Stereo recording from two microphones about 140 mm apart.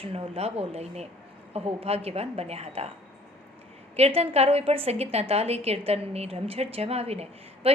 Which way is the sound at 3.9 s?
45° right (ahead or behind).